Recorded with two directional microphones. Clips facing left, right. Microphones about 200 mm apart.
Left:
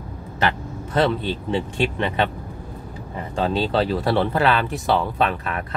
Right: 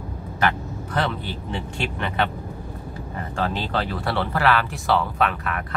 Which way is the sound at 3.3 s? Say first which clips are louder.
Left 5 dB; 20° left (ahead or behind).